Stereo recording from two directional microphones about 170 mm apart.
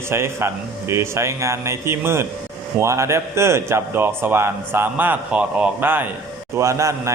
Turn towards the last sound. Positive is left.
turn(degrees=-15)  # may be behind; listen again after turning